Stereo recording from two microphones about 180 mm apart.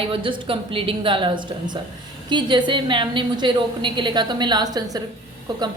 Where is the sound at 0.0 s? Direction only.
30° right (ahead or behind).